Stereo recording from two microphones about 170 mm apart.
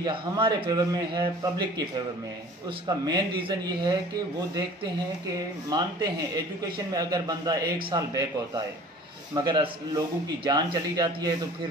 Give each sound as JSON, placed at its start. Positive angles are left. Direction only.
{"t": 0.0, "sound": "a man's voice", "side_deg": -25}
{"t": 2.9, "sound": "a man's voice", "side_deg": -25}
{"t": 5.7, "sound": "a man's voice", "side_deg": -25}